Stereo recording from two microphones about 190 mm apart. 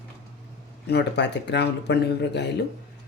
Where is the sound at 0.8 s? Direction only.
65° left (ahead or behind).